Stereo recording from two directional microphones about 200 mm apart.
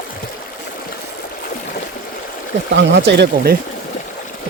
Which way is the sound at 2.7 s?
60° right (ahead or behind).